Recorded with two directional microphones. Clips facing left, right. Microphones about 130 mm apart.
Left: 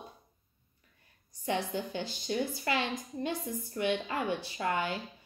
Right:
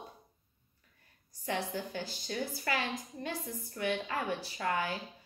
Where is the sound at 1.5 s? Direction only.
20° left (ahead or behind).